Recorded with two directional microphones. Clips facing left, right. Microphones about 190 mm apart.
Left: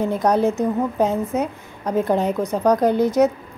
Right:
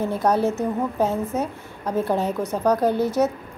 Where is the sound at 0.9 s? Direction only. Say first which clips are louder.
Left 3 dB; 15° left (ahead or behind).